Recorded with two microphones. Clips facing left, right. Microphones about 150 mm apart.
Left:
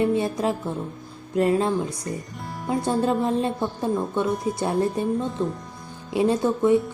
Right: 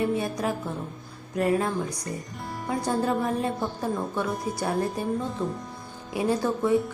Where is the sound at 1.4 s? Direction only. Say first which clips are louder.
Left 4 dB; 25° left (ahead or behind).